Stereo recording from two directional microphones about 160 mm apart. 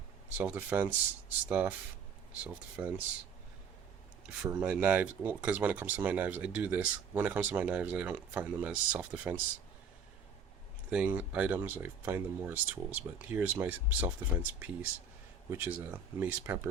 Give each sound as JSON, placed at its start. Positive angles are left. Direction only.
{"t": 0.3, "sound": "speech", "side_deg": -10}
{"t": 4.4, "sound": "speech", "side_deg": -10}
{"t": 10.9, "sound": "speech", "side_deg": -10}